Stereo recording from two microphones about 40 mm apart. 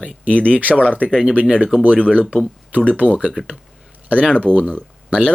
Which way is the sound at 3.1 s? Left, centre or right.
Centre.